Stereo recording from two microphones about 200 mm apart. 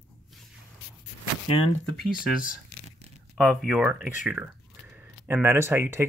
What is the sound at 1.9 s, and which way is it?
Speech, 5° right (ahead or behind).